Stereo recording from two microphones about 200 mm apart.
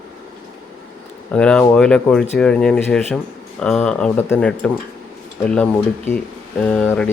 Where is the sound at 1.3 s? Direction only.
5° left (ahead or behind).